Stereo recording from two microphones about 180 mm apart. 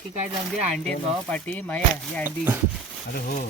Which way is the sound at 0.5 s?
5° left (ahead or behind).